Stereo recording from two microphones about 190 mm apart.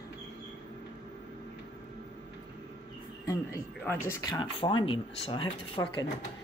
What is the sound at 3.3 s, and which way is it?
Speech, 15° left (ahead or behind).